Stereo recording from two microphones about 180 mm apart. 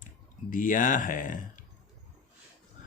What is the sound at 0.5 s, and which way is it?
Speech, 45° left (ahead or behind).